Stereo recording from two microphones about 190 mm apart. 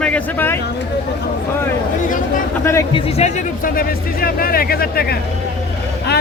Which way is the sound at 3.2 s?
35° left (ahead or behind).